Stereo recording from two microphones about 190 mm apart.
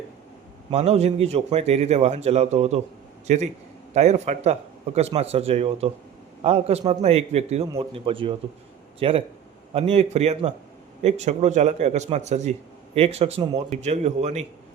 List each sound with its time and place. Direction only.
0.7 s a man's voice: 35° right (ahead or behind)